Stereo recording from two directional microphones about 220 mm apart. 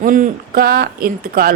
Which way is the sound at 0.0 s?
40° right (ahead or behind).